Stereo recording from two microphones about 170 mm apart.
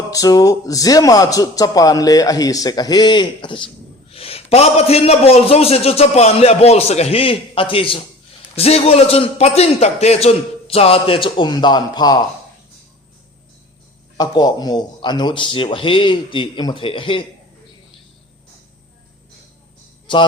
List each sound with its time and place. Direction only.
0.1 s a man's voice: 20° left (ahead or behind)
14.2 s speech: 25° left (ahead or behind)